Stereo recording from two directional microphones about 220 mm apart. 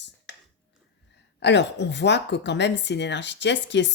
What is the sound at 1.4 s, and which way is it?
Speech, 50° left (ahead or behind).